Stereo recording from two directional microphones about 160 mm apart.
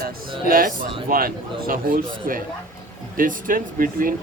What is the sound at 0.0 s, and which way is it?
Speech, 65° right (ahead or behind).